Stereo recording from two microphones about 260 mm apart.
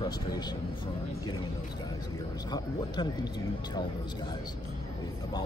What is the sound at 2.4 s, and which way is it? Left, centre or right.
Speech, centre.